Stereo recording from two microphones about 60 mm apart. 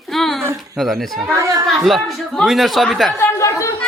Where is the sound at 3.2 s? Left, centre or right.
Left.